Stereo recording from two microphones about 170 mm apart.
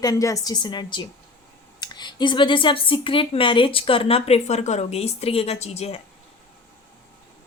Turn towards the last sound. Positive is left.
turn(degrees=40)  # may be behind; listen again after turning